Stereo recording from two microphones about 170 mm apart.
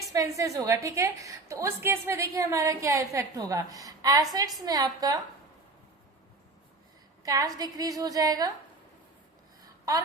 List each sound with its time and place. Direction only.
0.0 s a woman's voice: 20° right (ahead or behind)
7.3 s a woman's voice: 20° right (ahead or behind)